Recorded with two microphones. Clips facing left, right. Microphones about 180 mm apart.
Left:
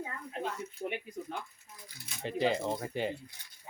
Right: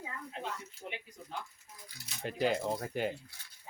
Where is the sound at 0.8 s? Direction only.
55° left (ahead or behind).